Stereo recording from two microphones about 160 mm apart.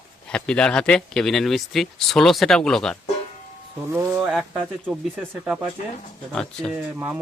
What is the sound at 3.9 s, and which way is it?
Speech, 15° right (ahead or behind).